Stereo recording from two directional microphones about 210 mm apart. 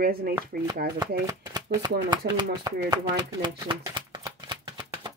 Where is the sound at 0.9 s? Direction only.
20° right (ahead or behind).